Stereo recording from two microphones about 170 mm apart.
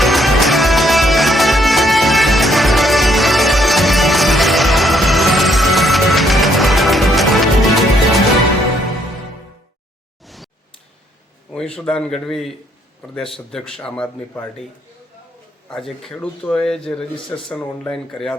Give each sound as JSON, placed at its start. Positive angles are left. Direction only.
{"t": 0.0, "sound": "music", "side_deg": 0}
{"t": 10.2, "sound": "a sound", "side_deg": 0}
{"t": 11.5, "sound": "speech", "side_deg": 5}
{"t": 15.7, "sound": "speech", "side_deg": 0}